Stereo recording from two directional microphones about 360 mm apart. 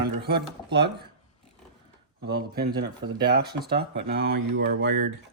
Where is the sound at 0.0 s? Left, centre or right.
Right.